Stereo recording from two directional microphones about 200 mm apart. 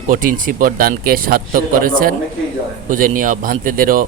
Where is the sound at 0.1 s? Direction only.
45° right (ahead or behind).